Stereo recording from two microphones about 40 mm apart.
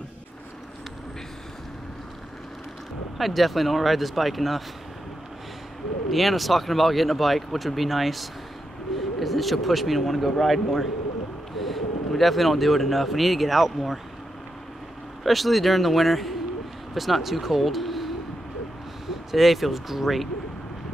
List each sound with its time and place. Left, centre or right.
3.2 s speech: centre
6.0 s speech: centre
15.2 s speech: centre
19.3 s speech: centre